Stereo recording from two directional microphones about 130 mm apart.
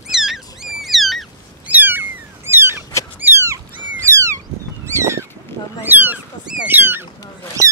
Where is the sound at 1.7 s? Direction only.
15° right (ahead or behind).